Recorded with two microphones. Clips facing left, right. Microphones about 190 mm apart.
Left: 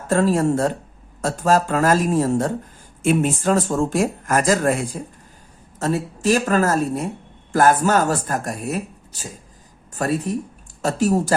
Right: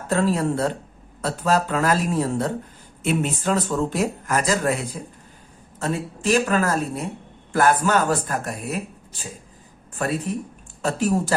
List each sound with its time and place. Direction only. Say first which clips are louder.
0.1 s speech: left 4 dB; 45° left (ahead or behind)